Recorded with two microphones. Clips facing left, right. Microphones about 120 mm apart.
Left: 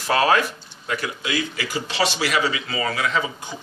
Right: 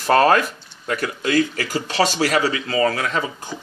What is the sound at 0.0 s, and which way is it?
A man's voice, 45° right (ahead or behind).